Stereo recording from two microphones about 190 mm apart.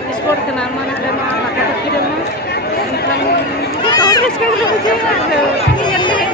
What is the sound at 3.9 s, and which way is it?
Speech, 20° left (ahead or behind).